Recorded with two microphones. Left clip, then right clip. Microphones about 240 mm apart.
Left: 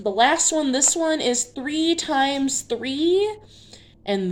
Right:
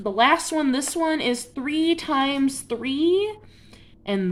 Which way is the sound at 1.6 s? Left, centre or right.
Right.